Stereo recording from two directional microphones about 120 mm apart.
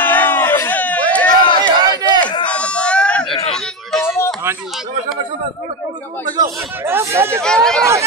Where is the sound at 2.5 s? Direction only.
10° left (ahead or behind).